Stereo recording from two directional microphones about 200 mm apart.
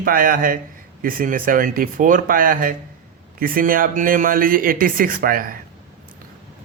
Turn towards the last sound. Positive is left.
turn(degrees=-45)  # may be behind; listen again after turning